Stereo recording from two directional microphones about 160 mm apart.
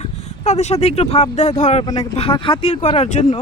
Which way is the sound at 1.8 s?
25° left (ahead or behind).